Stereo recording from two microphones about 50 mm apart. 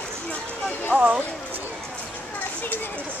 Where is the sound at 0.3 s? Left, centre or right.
Left.